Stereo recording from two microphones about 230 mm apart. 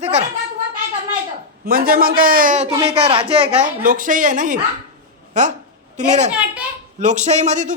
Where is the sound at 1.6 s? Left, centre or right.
Right.